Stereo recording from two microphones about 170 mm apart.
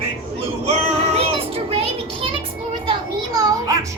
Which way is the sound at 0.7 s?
40° right (ahead or behind).